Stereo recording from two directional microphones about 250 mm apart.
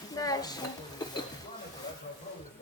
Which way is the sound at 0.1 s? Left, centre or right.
Centre.